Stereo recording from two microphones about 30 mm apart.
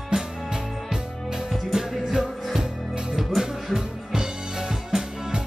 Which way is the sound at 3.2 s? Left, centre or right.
Centre.